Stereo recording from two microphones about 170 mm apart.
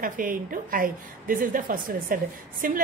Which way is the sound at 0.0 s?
55° right (ahead or behind).